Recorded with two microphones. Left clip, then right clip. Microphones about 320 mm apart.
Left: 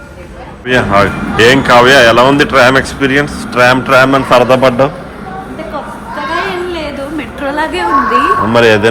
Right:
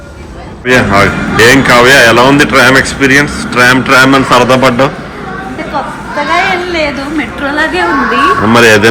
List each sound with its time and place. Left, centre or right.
0.6 s speech: centre
6.7 s a sound: centre
8.4 s speech: centre